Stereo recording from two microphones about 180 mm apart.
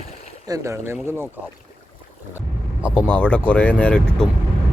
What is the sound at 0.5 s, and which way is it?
Speech, 15° right (ahead or behind).